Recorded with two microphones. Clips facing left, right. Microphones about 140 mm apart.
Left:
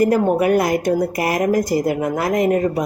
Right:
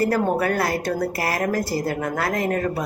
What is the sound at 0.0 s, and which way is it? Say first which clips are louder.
A woman's voice: left 5 dB; 15° left (ahead or behind).